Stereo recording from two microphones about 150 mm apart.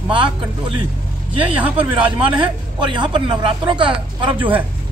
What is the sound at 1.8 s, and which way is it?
A man's voice, 35° right (ahead or behind).